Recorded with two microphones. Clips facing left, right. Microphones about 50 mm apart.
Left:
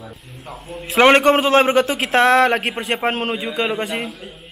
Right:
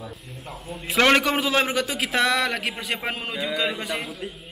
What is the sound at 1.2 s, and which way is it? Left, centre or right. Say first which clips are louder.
A man's voice: left 9 dB; left.